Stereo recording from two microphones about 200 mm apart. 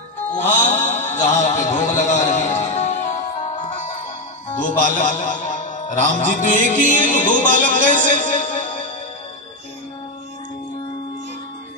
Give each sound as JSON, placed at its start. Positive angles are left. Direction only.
{"t": 0.3, "sound": "mantra", "side_deg": 40}
{"t": 4.5, "sound": "a man's voice", "side_deg": 40}
{"t": 7.5, "sound": "music", "side_deg": 40}